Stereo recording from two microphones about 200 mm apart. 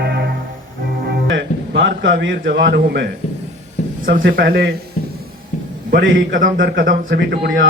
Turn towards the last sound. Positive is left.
turn(degrees=-60)  # may be behind; listen again after turning